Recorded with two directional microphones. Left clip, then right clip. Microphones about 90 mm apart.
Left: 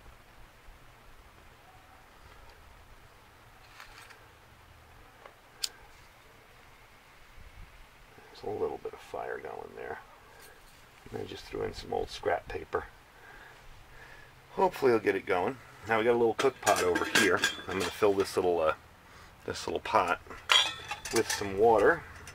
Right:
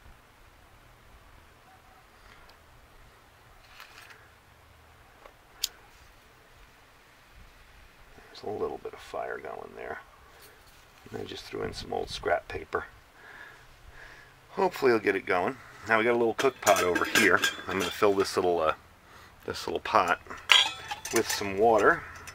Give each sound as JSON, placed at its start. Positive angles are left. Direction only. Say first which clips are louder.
{"t": 8.3, "sound": "speech", "louder": "right 1 dB", "side_deg": -25}
{"t": 11.2, "sound": "speech", "louder": "right 1 dB", "side_deg": -30}
{"t": 14.5, "sound": "speech", "louder": "right 1 dB", "side_deg": -40}
{"t": 16.7, "sound": "speech", "louder": "right 2 dB", "side_deg": -25}
{"t": 19.1, "sound": "speech", "louder": "right 2 dB", "side_deg": -25}
{"t": 20.5, "sound": "cutlery", "louder": "right 3 dB", "side_deg": -35}
{"t": 20.9, "sound": "stir", "louder": "right 2 dB", "side_deg": -25}
{"t": 21.5, "sound": "speech", "louder": "right 1 dB", "side_deg": -45}